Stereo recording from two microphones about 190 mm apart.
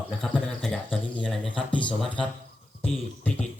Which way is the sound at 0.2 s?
Centre (ahead or behind).